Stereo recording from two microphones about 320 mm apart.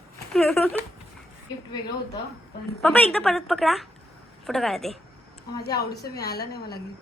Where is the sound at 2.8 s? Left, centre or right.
Centre.